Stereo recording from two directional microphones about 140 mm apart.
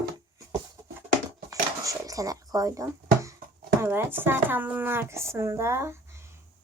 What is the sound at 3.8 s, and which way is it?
Speech, 15° right (ahead or behind).